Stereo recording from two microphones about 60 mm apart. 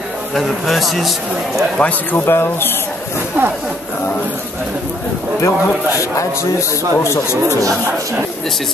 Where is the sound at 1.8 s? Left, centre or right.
Left.